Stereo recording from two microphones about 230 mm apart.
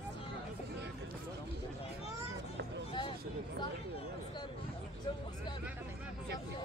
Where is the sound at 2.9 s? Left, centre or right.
Left.